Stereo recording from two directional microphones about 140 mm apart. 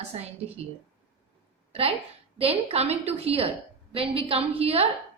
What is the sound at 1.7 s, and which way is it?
A woman's voice, 45° right (ahead or behind).